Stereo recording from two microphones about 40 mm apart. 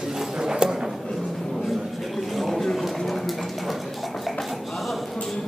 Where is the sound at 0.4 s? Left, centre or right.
Centre.